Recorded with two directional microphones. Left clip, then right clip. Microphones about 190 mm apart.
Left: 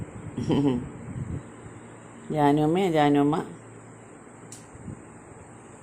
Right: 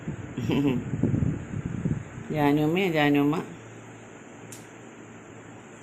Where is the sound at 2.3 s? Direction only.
10° left (ahead or behind).